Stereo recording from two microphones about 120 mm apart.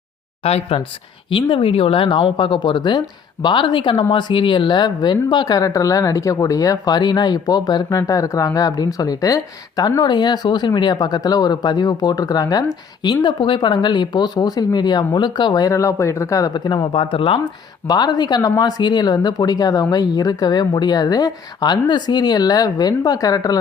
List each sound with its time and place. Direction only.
0.4 s speech: 55° left (ahead or behind)
1.3 s speech: 45° left (ahead or behind)
17.8 s speech: 35° left (ahead or behind)